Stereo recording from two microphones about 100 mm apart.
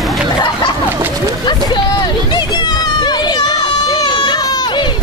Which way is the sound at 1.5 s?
45° left (ahead or behind).